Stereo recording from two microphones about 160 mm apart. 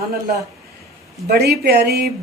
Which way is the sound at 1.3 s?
80° right.